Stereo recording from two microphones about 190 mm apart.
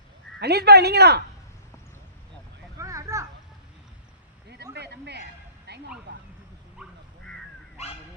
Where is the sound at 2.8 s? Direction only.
15° right (ahead or behind).